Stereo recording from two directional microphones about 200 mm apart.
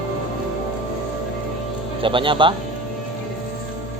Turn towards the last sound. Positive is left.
turn(degrees=-25)  # may be behind; listen again after turning